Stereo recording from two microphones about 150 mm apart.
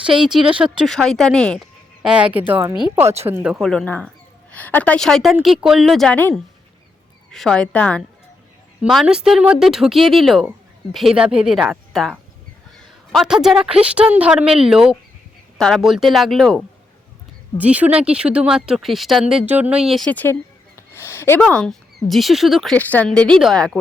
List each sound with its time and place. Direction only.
0.0 s speech: 5° right (ahead or behind)
2.0 s speech: 5° right (ahead or behind)
2.5 s a woman's voice: 20° right (ahead or behind); by 8.0 s 10° left (ahead or behind)
8.8 s a woman's voice: 5° right (ahead or behind)
17.6 s speech: 10° right (ahead or behind)
20.1 s a woman's voice: 10° left (ahead or behind)
20.7 s a sound: 15° left (ahead or behind)
21.4 s speech: 5° left (ahead or behind)